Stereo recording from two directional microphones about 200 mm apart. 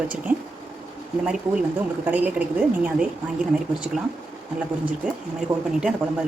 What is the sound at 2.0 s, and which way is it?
A woman's voice, 10° right (ahead or behind).